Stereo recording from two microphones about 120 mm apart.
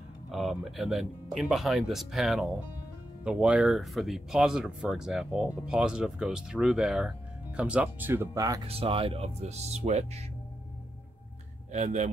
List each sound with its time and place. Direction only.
0.3 s speech: centre (ahead or behind)
8.6 s speech: 50° right (ahead or behind)
11.7 s speech: 85° right